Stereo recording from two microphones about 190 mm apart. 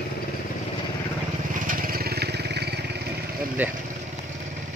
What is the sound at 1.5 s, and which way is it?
Vehicle, 45° right (ahead or behind).